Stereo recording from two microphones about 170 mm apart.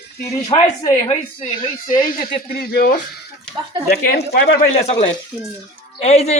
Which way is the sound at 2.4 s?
60° left (ahead or behind).